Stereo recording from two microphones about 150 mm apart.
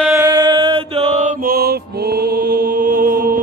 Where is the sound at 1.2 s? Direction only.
70° right (ahead or behind).